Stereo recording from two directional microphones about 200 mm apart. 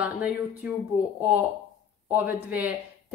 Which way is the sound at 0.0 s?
5° right (ahead or behind).